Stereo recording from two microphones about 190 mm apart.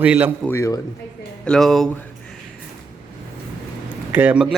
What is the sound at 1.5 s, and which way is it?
Speech, centre (ahead or behind).